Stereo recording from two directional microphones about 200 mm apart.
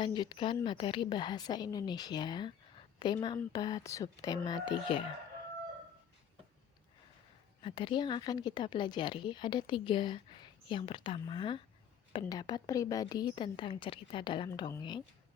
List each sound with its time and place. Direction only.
0.0 s speech: 20° left (ahead or behind)
7.6 s speech: 25° left (ahead or behind)